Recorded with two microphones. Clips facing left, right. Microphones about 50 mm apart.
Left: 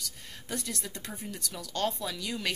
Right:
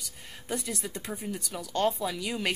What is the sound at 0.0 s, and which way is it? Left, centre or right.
Speech, centre.